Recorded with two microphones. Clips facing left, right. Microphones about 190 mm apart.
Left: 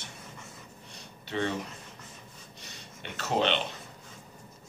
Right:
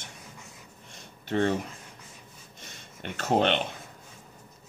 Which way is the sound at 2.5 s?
50° right (ahead or behind).